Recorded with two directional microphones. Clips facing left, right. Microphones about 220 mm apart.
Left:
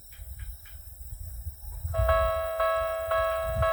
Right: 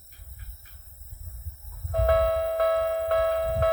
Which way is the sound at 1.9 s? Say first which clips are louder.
Right 4 dB; 45° right (ahead or behind).